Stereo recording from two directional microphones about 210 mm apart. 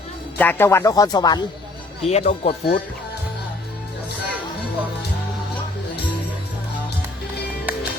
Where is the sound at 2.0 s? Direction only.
30° left (ahead or behind).